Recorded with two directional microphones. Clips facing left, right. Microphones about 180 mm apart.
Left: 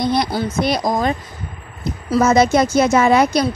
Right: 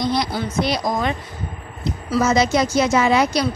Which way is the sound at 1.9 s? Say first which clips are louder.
Left 3 dB; 55° left (ahead or behind).